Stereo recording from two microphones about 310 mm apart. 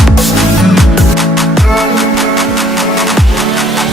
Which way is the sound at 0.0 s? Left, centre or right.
Centre.